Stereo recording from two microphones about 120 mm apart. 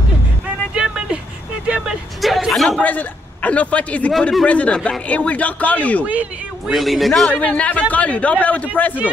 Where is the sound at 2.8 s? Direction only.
15° left (ahead or behind).